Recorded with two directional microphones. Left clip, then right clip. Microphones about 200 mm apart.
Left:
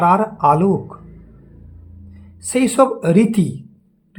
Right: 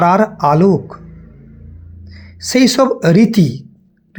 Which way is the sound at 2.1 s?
15° right (ahead or behind).